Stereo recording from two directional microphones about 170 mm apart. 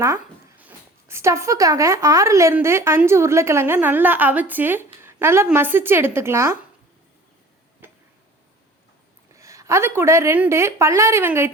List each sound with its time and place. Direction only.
0.0 s speech: 15° right (ahead or behind)
7.8 s a sound: 10° right (ahead or behind)
9.3 s speech: 20° right (ahead or behind)